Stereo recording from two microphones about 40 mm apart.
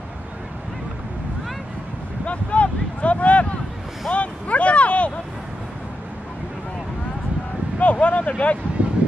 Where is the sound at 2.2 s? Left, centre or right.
Left.